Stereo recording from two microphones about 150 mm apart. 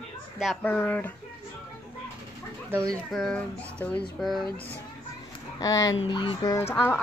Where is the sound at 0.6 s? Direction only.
10° left (ahead or behind).